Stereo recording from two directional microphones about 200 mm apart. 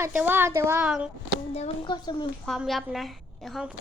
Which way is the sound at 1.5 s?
30° left (ahead or behind).